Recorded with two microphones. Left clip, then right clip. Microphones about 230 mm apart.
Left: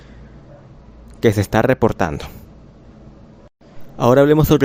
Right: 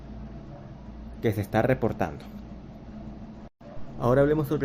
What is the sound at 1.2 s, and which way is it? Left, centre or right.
Speech, left.